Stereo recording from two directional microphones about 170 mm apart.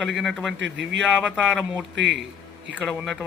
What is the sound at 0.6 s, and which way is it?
Speech, 90° right.